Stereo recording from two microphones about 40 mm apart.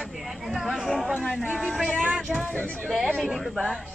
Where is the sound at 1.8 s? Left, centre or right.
Right.